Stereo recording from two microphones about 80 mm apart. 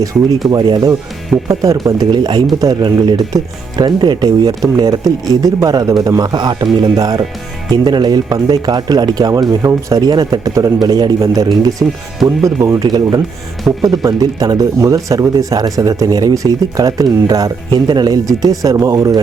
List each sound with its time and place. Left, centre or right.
0.0 s speech: right
1.9 s speech: right
2.6 s speech: right
12.4 s speech: right
12.9 s speech: right
17.8 s speech: right